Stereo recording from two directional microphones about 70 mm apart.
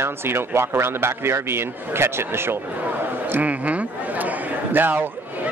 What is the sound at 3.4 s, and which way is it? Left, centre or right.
Chatter, right.